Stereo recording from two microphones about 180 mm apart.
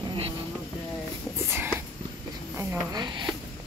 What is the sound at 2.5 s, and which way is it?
Speech, 20° right (ahead or behind).